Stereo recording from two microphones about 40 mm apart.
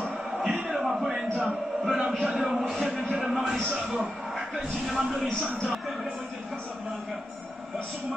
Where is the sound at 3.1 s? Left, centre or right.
Centre.